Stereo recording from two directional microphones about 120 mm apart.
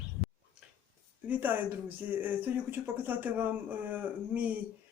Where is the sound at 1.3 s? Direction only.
15° right (ahead or behind).